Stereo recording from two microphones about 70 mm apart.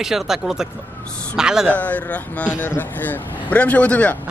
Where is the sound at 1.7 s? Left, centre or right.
Left.